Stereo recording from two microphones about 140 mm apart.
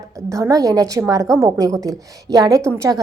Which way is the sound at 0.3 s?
25° right (ahead or behind).